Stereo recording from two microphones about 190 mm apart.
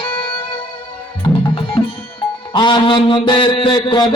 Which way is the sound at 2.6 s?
25° left (ahead or behind).